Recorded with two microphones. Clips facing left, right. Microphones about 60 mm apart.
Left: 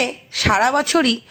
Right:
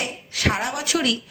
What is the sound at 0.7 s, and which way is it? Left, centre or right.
Speech, left.